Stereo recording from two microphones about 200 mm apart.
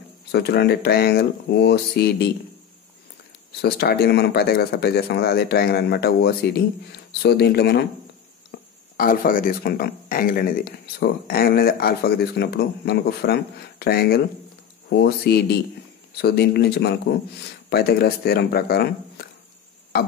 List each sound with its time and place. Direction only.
0.3 s speech: 55° left (ahead or behind)
3.6 s speech: 50° left (ahead or behind)
8.5 s speech: 45° left (ahead or behind)